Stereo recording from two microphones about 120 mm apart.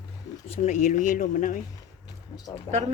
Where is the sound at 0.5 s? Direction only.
85° left.